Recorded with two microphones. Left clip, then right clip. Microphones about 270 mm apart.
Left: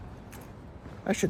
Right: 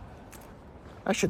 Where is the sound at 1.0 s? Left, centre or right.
Centre.